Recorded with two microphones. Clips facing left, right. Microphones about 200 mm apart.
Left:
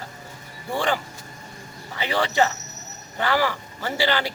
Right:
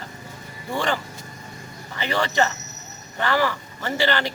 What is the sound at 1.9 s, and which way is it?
A man's voice, 10° left (ahead or behind).